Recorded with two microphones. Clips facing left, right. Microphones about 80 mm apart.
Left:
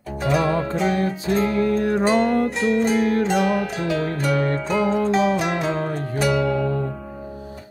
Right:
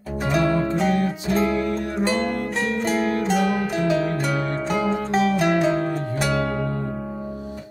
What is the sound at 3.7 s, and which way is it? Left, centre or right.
Harp, right.